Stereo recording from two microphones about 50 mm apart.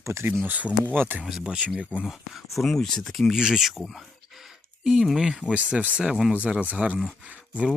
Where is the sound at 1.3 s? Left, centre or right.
Centre.